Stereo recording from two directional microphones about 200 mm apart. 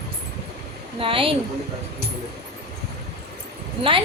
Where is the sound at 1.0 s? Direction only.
25° right (ahead or behind).